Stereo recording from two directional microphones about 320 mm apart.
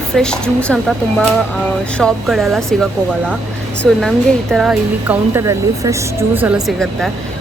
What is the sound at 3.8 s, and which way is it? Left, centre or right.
Speech, centre.